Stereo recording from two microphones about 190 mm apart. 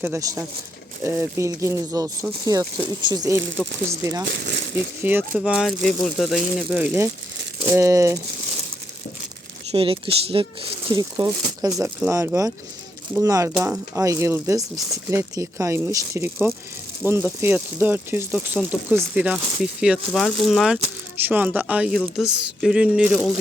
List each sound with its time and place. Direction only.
0.0 s speech: 15° right (ahead or behind)
4.3 s speech: 70° right (ahead or behind)
4.7 s speech: 10° right (ahead or behind)
9.7 s speech: 30° right (ahead or behind); by 23.2 s 5° right (ahead or behind)